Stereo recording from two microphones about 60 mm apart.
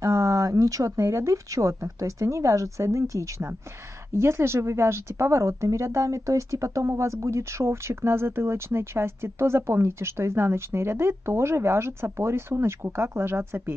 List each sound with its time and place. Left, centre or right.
0.0 s speech: right
4.1 s speech: right